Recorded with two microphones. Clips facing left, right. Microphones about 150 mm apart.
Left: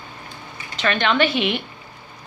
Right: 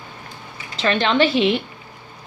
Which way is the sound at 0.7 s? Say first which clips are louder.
Right 2 dB; 30° right (ahead or behind).